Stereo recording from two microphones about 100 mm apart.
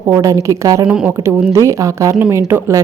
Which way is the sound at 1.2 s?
25° right (ahead or behind).